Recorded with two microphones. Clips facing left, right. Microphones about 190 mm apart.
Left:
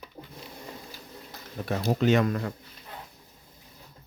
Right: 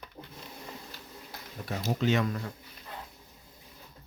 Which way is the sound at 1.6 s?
60° left (ahead or behind).